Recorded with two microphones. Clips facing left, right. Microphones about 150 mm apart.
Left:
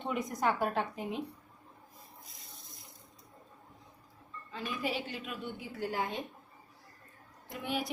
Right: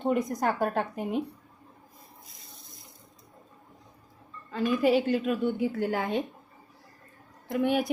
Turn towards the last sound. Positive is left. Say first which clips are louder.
# right 10 dB
turn(degrees=-55)  # may be behind; listen again after turning